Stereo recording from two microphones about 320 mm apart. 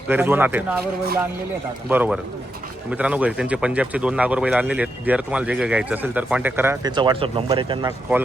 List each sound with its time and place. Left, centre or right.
0.1 s speech: centre
1.9 s speech: centre